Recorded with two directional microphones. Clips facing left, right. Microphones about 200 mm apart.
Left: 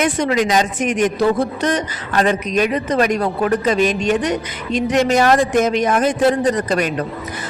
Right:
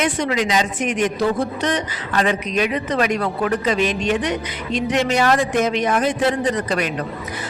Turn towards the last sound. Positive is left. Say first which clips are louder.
# left 3 dB
turn(degrees=45)  # may be behind; listen again after turning